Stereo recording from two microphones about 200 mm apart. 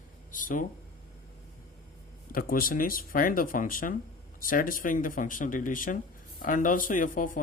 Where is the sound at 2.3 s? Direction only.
45° left (ahead or behind).